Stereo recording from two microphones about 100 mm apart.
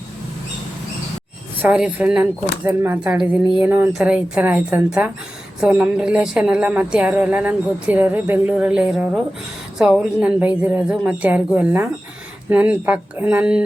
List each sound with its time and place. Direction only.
1.6 s a woman's voice: 15° right (ahead or behind)
2.6 s speech: 25° right (ahead or behind)
3.0 s a woman's voice: 10° right (ahead or behind)